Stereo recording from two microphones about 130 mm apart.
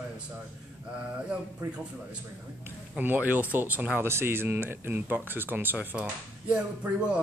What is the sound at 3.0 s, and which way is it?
Speech, 15° right (ahead or behind).